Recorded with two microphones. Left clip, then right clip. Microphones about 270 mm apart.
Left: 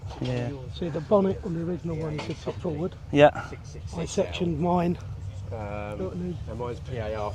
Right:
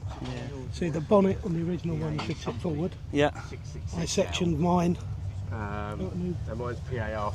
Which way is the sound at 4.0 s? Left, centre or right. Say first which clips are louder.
Even; centre.